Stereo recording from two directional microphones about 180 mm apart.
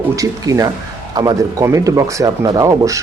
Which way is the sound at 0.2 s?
20° right (ahead or behind).